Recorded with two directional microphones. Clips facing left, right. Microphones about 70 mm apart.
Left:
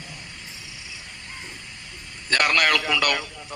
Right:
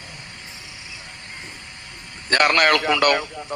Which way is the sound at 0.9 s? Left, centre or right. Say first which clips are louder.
Right 2 dB; right.